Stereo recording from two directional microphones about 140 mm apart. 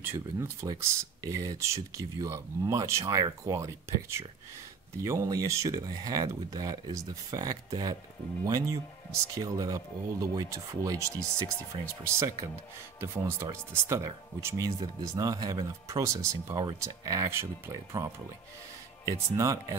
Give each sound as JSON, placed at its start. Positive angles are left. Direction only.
{"t": 0.0, "sound": "speech", "side_deg": -20}
{"t": 11.7, "sound": "speech", "side_deg": -40}
{"t": 13.0, "sound": "speech", "side_deg": -20}
{"t": 19.3, "sound": "speech", "side_deg": -20}